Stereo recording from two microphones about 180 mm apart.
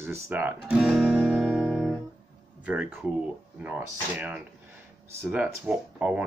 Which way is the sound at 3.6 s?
5° right (ahead or behind).